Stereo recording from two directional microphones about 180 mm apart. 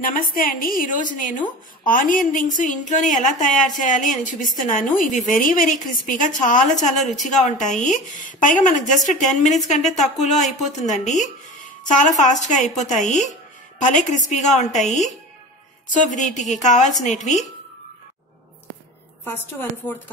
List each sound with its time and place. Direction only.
0.0 s a woman's voice: 50° left (ahead or behind)